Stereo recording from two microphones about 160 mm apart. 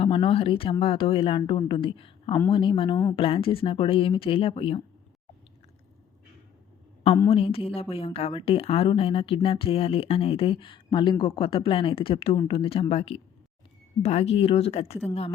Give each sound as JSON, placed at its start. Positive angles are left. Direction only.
{"t": 0.0, "sound": "a woman's voice", "side_deg": 35}
{"t": 7.3, "sound": "a woman's voice", "side_deg": 35}